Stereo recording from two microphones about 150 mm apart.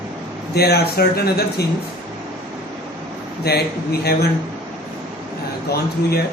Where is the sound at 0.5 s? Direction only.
90° left.